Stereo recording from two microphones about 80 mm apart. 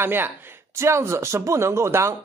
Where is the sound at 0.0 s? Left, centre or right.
Right.